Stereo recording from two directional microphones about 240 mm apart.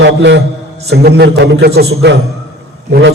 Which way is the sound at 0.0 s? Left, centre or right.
Right.